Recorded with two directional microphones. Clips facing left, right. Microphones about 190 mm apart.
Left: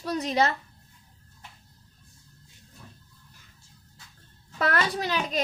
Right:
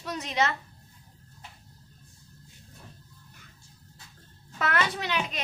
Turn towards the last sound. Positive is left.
turn(degrees=35)  # may be behind; listen again after turning